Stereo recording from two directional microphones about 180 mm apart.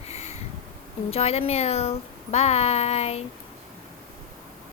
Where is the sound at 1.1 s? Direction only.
35° left (ahead or behind).